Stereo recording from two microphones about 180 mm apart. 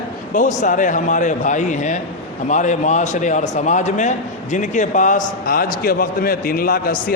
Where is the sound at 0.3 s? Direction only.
45° left (ahead or behind).